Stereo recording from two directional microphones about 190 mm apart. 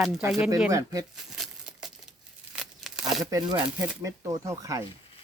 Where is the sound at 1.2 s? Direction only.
Centre (ahead or behind).